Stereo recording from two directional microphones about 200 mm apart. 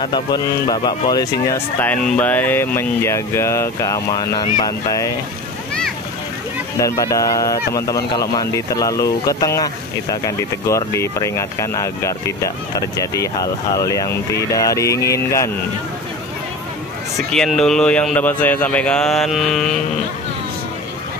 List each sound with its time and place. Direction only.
0.0 s speech: 20° left (ahead or behind)
6.8 s speech: 15° left (ahead or behind)
17.3 s speech: 5° left (ahead or behind)